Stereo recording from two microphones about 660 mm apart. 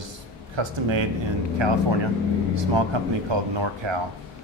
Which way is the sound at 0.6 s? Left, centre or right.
Right.